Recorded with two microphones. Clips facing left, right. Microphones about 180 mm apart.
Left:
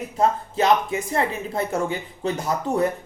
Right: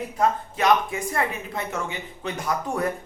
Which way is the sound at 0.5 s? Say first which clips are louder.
Left 2 dB; 25° left (ahead or behind).